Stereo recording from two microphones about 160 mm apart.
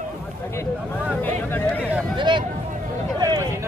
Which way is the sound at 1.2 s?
10° left (ahead or behind).